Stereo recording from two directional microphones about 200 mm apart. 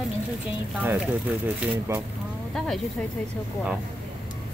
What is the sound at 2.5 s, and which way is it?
Speech, centre (ahead or behind).